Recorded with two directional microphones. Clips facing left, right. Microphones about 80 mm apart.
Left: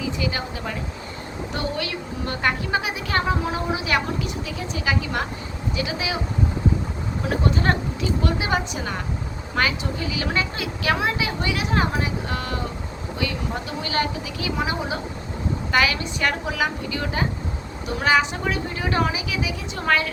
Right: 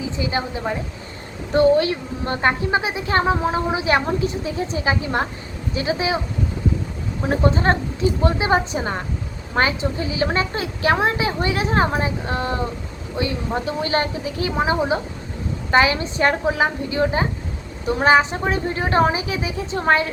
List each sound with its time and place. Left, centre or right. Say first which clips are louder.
0.0 s a woman's voice: right 2 dB; right
7.3 s a woman's voice: right 4 dB; right